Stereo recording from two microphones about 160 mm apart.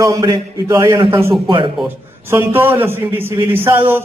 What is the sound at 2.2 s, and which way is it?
A man's voice, 15° right (ahead or behind).